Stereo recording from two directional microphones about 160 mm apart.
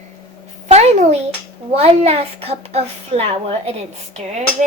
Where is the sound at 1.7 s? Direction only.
40° right (ahead or behind).